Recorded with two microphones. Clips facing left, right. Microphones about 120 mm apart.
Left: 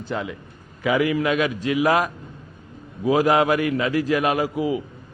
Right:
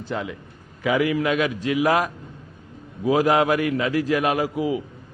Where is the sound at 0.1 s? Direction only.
25° left (ahead or behind).